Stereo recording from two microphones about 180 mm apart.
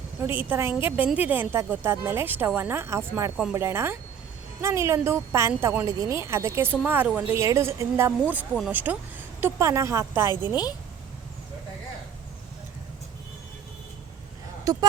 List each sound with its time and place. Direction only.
0.4 s speech: 10° right (ahead or behind)
14.6 s speech: 20° right (ahead or behind)